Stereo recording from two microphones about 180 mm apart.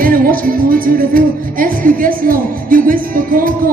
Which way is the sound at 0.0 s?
50° right (ahead or behind).